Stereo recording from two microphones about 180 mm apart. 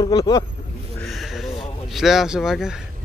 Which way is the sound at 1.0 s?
Centre (ahead or behind).